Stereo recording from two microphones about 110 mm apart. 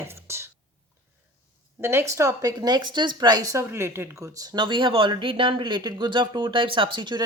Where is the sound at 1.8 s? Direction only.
20° right (ahead or behind).